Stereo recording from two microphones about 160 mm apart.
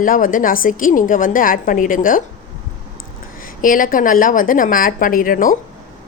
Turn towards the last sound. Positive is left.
turn(degrees=60)  # may be behind; listen again after turning